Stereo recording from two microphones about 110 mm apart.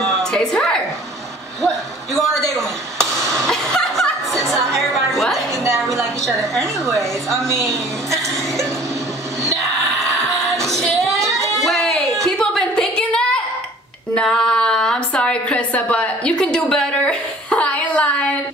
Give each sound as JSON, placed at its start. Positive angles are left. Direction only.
{"t": 0.0, "sound": "a sound", "side_deg": 5}
{"t": 1.6, "sound": "speech", "side_deg": 0}
{"t": 3.3, "sound": "chuckle", "side_deg": 5}
{"t": 4.5, "sound": "music", "side_deg": 0}
{"t": 6.9, "sound": "a woman's voice", "side_deg": 5}
{"t": 7.3, "sound": "a woman's voice", "side_deg": -25}
{"t": 10.2, "sound": "music", "side_deg": 0}
{"t": 11.1, "sound": "a sound", "side_deg": -25}
{"t": 11.4, "sound": "a sound", "side_deg": 5}